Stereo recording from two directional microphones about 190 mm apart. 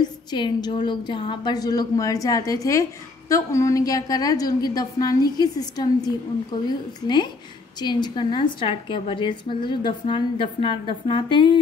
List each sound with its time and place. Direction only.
0.0 s a woman's voice: 20° left (ahead or behind)
7.8 s a woman's voice: 25° left (ahead or behind)